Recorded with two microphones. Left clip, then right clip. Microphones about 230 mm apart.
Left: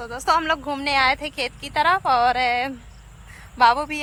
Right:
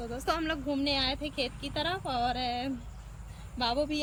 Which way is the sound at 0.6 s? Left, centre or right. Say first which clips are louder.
Left 11 dB; left.